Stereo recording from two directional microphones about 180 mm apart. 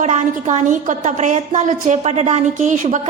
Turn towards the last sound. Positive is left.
turn(degrees=-40)  # may be behind; listen again after turning